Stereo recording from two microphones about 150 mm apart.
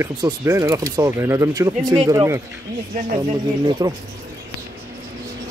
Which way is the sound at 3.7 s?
25° right (ahead or behind).